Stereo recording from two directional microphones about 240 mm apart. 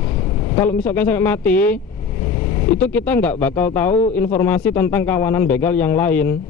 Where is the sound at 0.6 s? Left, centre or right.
Centre.